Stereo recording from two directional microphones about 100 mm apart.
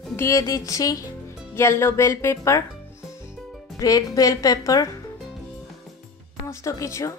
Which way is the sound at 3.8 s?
35° left (ahead or behind).